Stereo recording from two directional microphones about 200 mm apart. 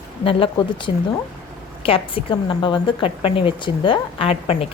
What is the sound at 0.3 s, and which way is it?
A woman's voice, 25° left (ahead or behind).